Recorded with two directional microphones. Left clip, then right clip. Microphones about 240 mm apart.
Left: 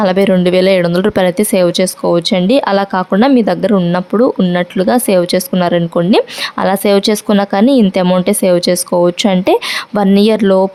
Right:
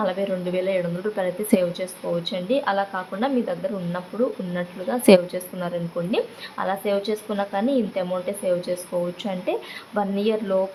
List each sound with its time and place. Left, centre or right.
0.0 s speech: left